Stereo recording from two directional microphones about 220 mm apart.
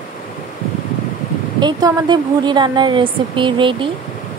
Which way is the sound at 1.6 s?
20° right (ahead or behind).